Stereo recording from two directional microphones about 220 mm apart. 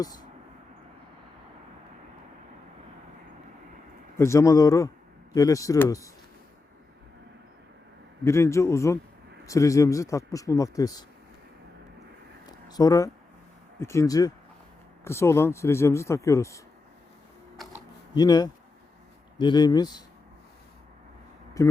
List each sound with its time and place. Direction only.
4.2 s a man's voice: 15° left (ahead or behind)
8.2 s a man's voice: 10° left (ahead or behind)
12.5 s a sound: 20° left (ahead or behind)
13.7 s a man's voice: 15° left (ahead or behind)
18.1 s a man's voice: 15° left (ahead or behind)
21.6 s a man's voice: 15° left (ahead or behind)